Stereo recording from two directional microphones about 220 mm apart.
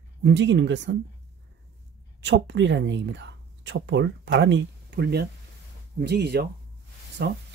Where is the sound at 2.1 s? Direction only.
55° right (ahead or behind).